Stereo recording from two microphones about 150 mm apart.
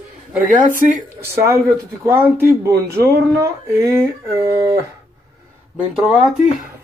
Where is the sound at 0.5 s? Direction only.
65° right (ahead or behind).